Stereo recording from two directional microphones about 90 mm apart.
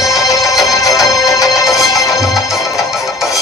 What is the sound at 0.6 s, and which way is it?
Music, 40° left (ahead or behind).